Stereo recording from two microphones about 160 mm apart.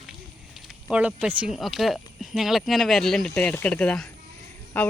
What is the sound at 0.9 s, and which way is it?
Speech, 5° right (ahead or behind).